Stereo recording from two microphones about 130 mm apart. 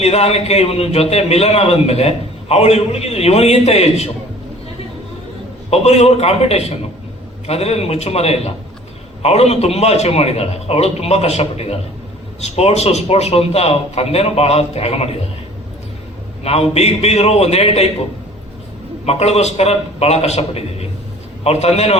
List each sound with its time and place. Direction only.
0.0 s a man's voice: 55° left (ahead or behind)
5.7 s a man's voice: 55° left (ahead or behind)
16.4 s a man's voice: 50° left (ahead or behind)
19.0 s a man's voice: 55° left (ahead or behind)